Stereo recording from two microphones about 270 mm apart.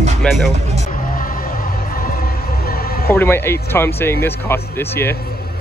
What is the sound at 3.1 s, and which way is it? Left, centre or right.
Speech, centre.